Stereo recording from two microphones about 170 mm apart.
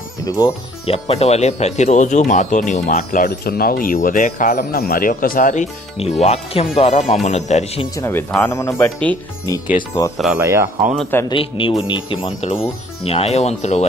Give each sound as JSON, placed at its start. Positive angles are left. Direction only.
{"t": 0.2, "sound": "speech", "side_deg": 20}
{"t": 0.8, "sound": "speech", "side_deg": 35}
{"t": 3.3, "sound": "speech", "side_deg": 60}
{"t": 7.9, "sound": "speech", "side_deg": 15}
{"t": 10.1, "sound": "speech", "side_deg": 0}
{"t": 10.4, "sound": "speech", "side_deg": -15}
{"t": 11.0, "sound": "speech", "side_deg": 10}
{"t": 11.2, "sound": "speech", "side_deg": 30}